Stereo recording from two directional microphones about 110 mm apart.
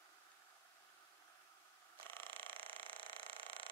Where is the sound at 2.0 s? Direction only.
20° left (ahead or behind).